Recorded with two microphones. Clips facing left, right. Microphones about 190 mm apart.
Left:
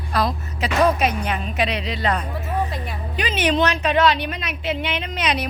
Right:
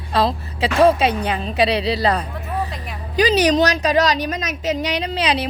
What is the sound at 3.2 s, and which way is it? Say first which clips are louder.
A woman's voice: right 5 dB; 35° right (ahead or behind).